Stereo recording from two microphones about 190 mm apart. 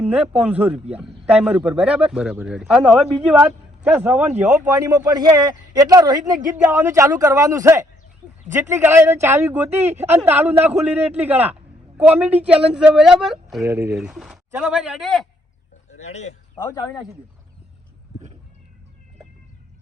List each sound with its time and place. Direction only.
0.0 s a man's voice: 5° right (ahead or behind)
13.6 s a man's voice: 15° right (ahead or behind)
13.9 s a man's voice: centre (ahead or behind)
15.9 s speech: 35° left (ahead or behind)